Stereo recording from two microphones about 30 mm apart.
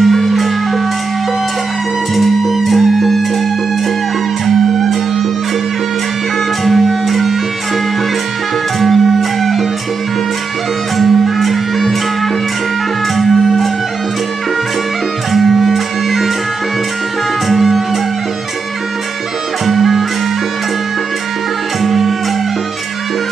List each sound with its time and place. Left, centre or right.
0.0 s music: centre
2.1 s music: centre
4.5 s music: centre
6.6 s music: centre
8.7 s music: centre
11.0 s music: centre
13.1 s music: centre
15.3 s music: centre
17.5 s music: centre
19.6 s music: centre
21.8 s music: centre